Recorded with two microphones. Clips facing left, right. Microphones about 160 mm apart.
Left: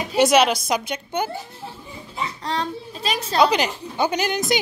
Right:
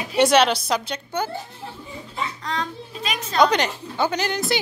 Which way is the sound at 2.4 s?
30° left (ahead or behind).